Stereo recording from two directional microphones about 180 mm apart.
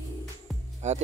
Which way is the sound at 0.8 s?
40° right (ahead or behind).